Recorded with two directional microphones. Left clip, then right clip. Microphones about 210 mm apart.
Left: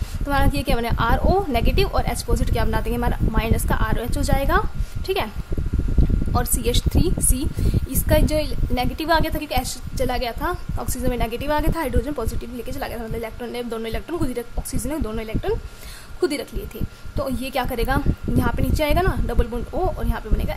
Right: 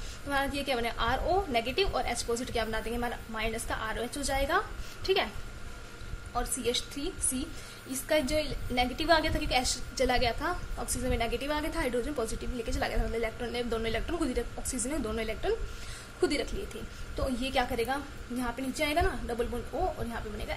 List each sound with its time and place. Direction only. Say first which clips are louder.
0.3 s a woman's voice: left 8 dB; 30° left (ahead or behind)
6.3 s a woman's voice: left 6 dB; 30° left (ahead or behind)